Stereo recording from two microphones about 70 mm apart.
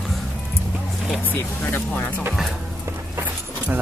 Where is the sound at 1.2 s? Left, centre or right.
Left.